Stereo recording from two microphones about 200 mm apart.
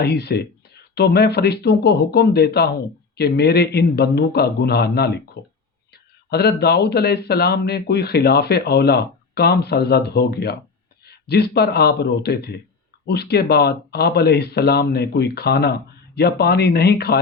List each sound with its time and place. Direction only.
0.0 s speech: 55° left (ahead or behind)